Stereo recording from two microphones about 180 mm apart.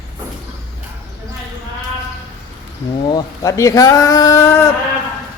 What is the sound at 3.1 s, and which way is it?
Speech, 20° left (ahead or behind).